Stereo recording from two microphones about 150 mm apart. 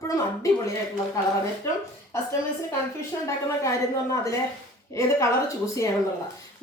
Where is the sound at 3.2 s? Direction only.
20° left (ahead or behind).